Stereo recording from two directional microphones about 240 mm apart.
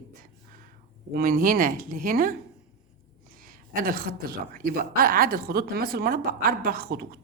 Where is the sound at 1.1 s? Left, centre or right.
Right.